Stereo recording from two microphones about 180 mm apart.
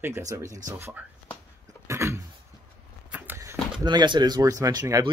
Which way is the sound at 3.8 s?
25° right (ahead or behind).